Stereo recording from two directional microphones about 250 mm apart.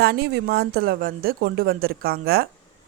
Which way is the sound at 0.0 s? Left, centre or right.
Right.